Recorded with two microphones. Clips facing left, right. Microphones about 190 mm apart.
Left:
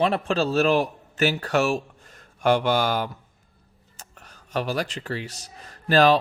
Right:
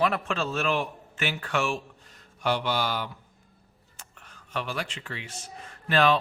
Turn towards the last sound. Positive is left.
turn(degrees=40)  # may be behind; listen again after turning